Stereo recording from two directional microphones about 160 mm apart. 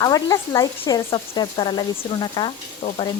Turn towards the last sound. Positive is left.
turn(degrees=35)  # may be behind; listen again after turning